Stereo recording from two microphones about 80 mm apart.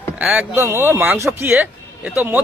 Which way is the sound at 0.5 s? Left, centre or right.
Right.